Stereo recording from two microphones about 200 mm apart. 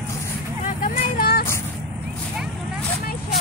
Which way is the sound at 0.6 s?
40° left (ahead or behind).